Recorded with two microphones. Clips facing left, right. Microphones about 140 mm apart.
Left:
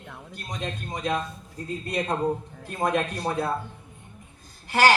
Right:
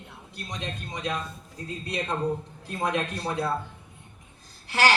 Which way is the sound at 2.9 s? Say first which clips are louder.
Left 3 dB; 45° left (ahead or behind).